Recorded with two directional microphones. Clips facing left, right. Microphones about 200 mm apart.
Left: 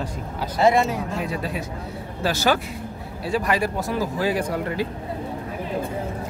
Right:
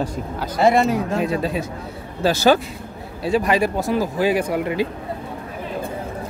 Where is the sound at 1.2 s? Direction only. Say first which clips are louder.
Right 6 dB; 25° right (ahead or behind).